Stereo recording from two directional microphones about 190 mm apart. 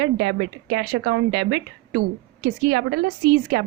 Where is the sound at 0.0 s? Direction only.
65° right (ahead or behind).